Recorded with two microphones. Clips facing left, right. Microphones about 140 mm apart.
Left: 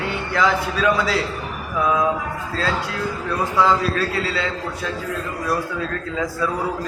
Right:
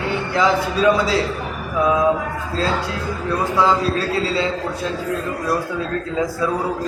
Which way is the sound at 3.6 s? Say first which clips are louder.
Even; 30° right (ahead or behind).